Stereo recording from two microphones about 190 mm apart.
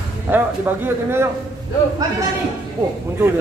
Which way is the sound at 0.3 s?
10° right (ahead or behind).